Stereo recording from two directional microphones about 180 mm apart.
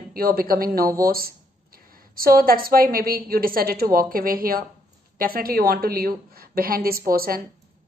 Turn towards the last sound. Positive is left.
turn(degrees=-55)  # may be behind; listen again after turning